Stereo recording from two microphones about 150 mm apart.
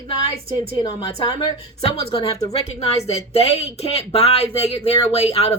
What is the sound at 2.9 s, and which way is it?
A woman's voice, 45° left (ahead or behind).